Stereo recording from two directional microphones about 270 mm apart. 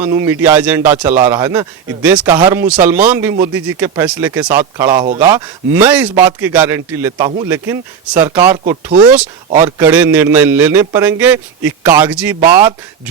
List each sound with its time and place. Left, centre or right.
0.0 s a man's voice: centre
4.9 s speech: right
5.2 s a man's voice: centre
7.3 s speech: centre
7.5 s a man's voice: centre